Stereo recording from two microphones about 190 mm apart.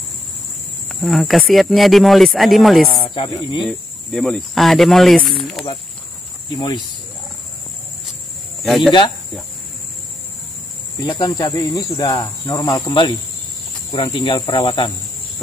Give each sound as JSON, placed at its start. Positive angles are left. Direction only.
{"t": 1.0, "sound": "speech", "side_deg": 0}
{"t": 3.0, "sound": "speech", "side_deg": 20}
{"t": 3.6, "sound": "speech", "side_deg": 0}
{"t": 5.4, "sound": "snake", "side_deg": 0}
{"t": 6.5, "sound": "speech", "side_deg": 25}
{"t": 8.6, "sound": "speech", "side_deg": 0}
{"t": 11.0, "sound": "speech", "side_deg": 20}